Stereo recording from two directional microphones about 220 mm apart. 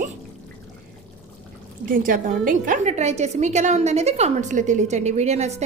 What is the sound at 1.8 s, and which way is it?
A woman's voice, 40° right (ahead or behind).